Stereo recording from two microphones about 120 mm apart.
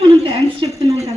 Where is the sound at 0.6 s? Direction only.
40° right (ahead or behind).